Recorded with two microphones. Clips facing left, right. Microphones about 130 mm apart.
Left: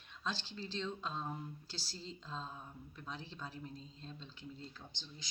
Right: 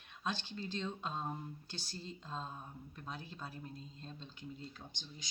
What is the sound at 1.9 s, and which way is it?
Speech, 55° right (ahead or behind).